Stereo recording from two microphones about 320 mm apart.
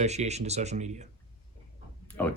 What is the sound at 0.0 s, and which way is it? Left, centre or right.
Speech, right.